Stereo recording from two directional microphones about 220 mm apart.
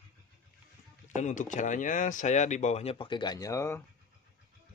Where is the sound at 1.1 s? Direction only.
35° left (ahead or behind); by 3.8 s 15° left (ahead or behind).